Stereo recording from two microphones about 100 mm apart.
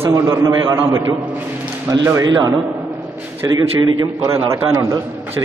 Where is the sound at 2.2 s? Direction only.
40° right (ahead or behind).